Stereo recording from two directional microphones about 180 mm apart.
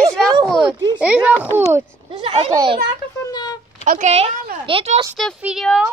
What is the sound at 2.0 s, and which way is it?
Speech, 30° right (ahead or behind).